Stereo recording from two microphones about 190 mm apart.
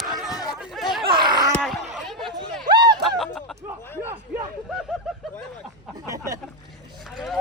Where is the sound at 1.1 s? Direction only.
25° right (ahead or behind).